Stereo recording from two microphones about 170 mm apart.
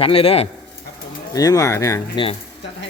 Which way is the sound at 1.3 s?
20° left (ahead or behind).